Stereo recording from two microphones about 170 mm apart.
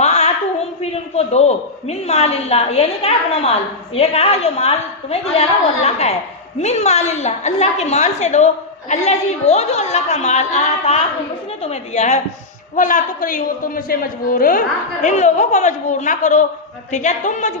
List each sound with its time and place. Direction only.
0.0 s a sound: 40° left (ahead or behind)
0.8 s a woman's voice: 40° left (ahead or behind); by 14.6 s 55° left (ahead or behind)
15.0 s a woman's voice: 40° left (ahead or behind)